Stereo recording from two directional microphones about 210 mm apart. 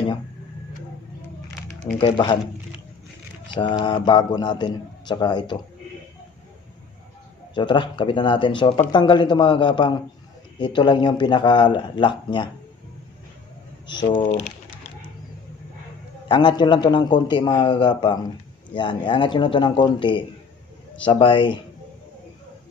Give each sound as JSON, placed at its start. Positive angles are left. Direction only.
{"t": 2.0, "sound": "a man's voice", "side_deg": 25}
{"t": 3.5, "sound": "a man's voice", "side_deg": 20}
{"t": 7.5, "sound": "a man's voice", "side_deg": 20}
{"t": 13.8, "sound": "speech", "side_deg": 20}
{"t": 16.3, "sound": "a man's voice", "side_deg": 20}